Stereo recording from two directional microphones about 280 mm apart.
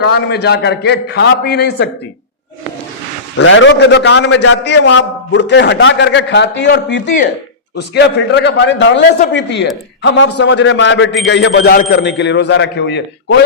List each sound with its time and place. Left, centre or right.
0.0 s a man's voice: left
3.3 s a man's voice: left